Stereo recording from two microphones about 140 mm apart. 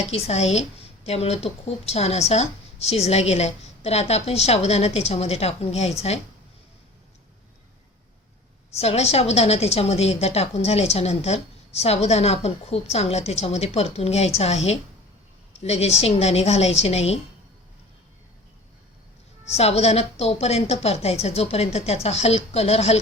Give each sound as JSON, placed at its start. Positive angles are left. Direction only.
{"t": 0.1, "sound": "a woman's voice", "side_deg": 50}
{"t": 8.7, "sound": "a woman's voice", "side_deg": 50}
{"t": 19.5, "sound": "a woman's voice", "side_deg": 50}